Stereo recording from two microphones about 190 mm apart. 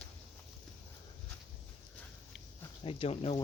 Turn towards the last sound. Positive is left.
turn(degrees=30)  # may be behind; listen again after turning